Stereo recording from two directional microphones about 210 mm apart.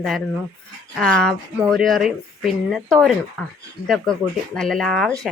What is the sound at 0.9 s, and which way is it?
Speech, 5° left (ahead or behind).